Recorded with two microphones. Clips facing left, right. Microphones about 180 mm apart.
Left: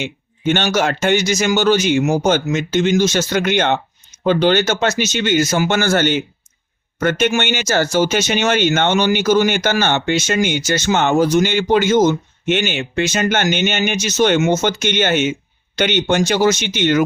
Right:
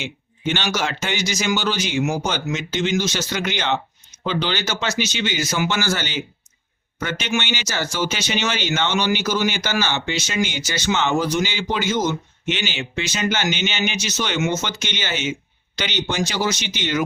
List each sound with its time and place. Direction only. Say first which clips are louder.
0.0 s speech: left 6 dB; 50° left (ahead or behind)